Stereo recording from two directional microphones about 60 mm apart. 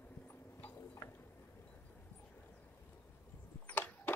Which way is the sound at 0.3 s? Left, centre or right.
Left.